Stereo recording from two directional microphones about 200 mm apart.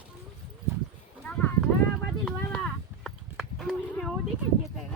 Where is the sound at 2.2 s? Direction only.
Centre (ahead or behind).